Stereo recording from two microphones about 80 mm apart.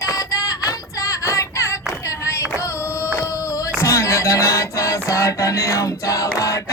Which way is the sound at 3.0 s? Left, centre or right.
Left.